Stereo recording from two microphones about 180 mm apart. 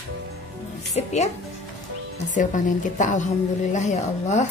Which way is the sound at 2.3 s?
45° left (ahead or behind).